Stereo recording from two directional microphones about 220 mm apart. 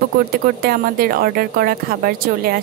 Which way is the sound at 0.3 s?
45° right (ahead or behind).